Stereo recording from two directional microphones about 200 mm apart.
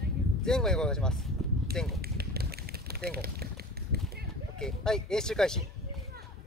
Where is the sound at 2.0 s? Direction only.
50° right (ahead or behind).